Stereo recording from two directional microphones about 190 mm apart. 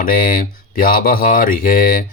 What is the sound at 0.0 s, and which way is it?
Mantra, 50° left (ahead or behind).